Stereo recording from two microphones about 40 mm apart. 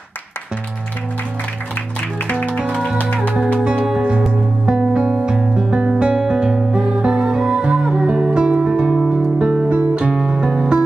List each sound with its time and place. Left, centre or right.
3.3 s music: right
10.1 s music: centre